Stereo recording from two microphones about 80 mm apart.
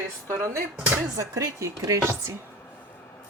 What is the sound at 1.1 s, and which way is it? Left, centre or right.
Speech, right.